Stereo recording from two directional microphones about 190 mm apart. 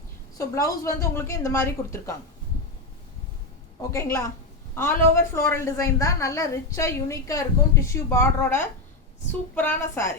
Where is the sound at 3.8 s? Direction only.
15° left (ahead or behind).